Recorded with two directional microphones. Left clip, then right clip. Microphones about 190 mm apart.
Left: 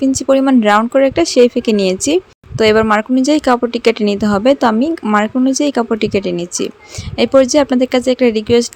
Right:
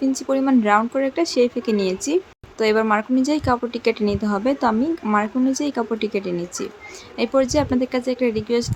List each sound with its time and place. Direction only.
0.0 s speech: 35° left (ahead or behind)